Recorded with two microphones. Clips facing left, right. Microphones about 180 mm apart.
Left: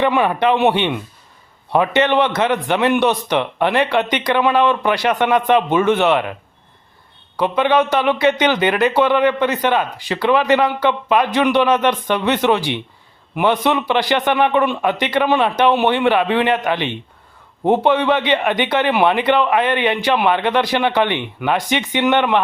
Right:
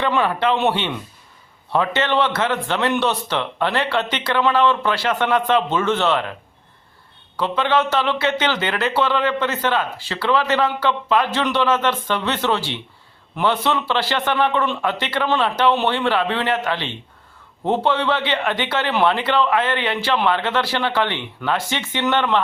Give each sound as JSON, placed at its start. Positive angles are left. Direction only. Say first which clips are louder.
{"t": 0.0, "sound": "a man's voice", "louder": "left 4 dB", "side_deg": 15}
{"t": 7.3, "sound": "a man's voice", "louder": "left 4 dB", "side_deg": 15}